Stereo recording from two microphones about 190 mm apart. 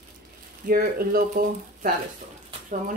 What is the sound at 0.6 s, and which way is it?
Speech, 50° right (ahead or behind).